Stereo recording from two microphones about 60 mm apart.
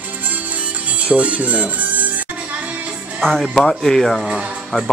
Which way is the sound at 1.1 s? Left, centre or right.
Right.